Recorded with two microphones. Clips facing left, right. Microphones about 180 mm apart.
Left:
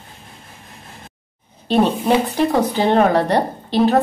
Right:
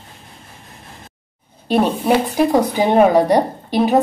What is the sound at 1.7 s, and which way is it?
Speech, 10° right (ahead or behind).